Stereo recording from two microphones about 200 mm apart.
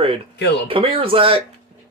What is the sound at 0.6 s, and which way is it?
Speech, 30° right (ahead or behind).